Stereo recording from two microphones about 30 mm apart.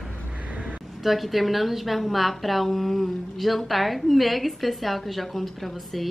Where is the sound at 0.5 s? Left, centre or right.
Right.